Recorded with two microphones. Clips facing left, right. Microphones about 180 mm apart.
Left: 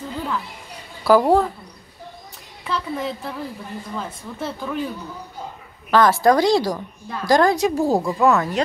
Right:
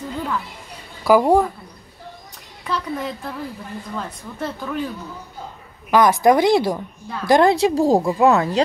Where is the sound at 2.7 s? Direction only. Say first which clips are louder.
Even; centre (ahead or behind).